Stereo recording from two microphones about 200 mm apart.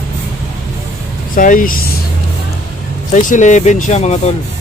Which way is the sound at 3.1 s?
40° left (ahead or behind).